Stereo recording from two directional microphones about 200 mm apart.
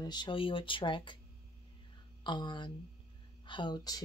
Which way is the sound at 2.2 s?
20° left (ahead or behind).